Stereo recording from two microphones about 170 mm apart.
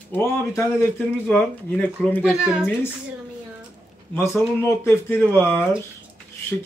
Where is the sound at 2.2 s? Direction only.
5° right (ahead or behind).